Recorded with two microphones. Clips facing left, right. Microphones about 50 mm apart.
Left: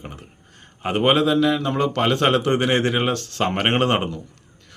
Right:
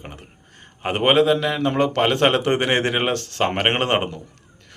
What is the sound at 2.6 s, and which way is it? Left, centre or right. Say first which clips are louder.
Speech: even; right.